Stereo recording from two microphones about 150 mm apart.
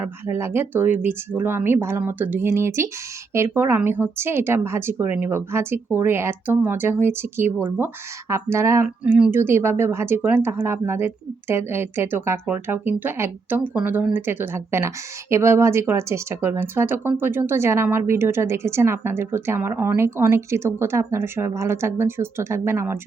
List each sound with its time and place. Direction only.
0.0 s speech: 15° right (ahead or behind)